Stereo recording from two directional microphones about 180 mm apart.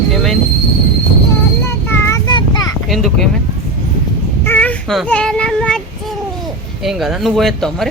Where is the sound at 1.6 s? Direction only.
15° left (ahead or behind).